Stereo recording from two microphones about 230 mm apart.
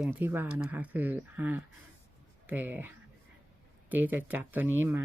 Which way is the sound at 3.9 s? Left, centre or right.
Centre.